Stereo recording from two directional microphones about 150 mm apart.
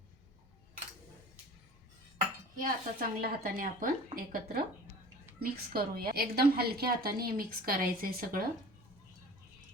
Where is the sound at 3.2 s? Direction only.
70° right (ahead or behind).